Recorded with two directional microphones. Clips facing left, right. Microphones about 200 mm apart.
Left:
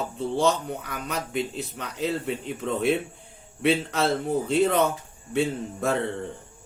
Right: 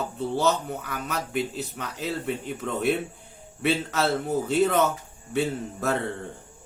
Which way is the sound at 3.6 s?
5° right (ahead or behind).